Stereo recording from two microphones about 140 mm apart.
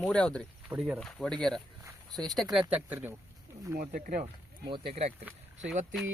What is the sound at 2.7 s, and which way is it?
Speech, 15° right (ahead or behind).